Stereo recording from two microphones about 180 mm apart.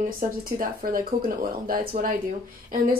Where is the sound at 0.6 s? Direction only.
50° right (ahead or behind).